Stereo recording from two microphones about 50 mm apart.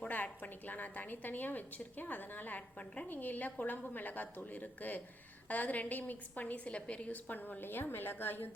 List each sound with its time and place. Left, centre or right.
0.1 s a woman's voice: left
3.1 s a woman's voice: left